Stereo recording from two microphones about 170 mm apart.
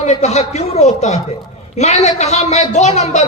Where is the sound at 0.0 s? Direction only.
40° left (ahead or behind).